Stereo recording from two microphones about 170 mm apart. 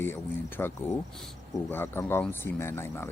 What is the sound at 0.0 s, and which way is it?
Speech, 15° left (ahead or behind).